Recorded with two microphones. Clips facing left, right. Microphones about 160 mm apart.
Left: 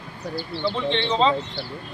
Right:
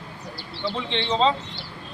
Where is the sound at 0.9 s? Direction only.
Centre (ahead or behind).